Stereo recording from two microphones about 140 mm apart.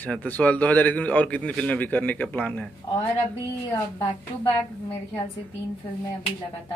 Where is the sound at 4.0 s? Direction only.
40° left (ahead or behind).